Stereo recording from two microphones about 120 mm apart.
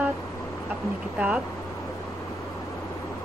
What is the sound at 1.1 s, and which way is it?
Speech, 10° right (ahead or behind).